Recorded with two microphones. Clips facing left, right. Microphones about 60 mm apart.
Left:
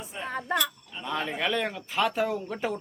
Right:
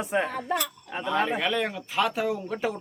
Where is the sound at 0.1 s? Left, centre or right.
Right.